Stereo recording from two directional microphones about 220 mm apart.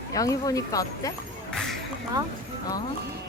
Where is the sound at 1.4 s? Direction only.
Centre (ahead or behind).